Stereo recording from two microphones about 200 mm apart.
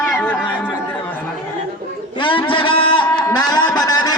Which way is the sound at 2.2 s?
25° left (ahead or behind).